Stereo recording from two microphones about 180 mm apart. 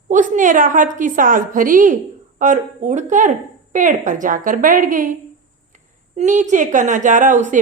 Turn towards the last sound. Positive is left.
turn(degrees=-45)  # may be behind; listen again after turning